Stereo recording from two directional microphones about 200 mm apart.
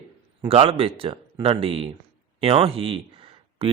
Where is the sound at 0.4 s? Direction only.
30° right (ahead or behind).